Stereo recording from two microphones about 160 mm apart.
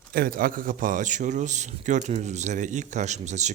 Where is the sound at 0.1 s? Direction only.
60° right (ahead or behind).